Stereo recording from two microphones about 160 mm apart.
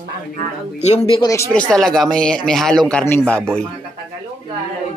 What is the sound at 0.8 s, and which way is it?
Speech, 45° left (ahead or behind).